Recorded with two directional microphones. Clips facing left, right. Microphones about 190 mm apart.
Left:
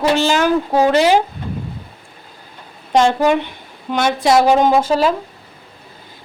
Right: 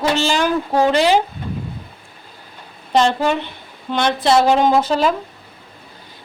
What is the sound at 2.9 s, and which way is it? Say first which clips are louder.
A woman's voice: left 3 dB; 10° left (ahead or behind).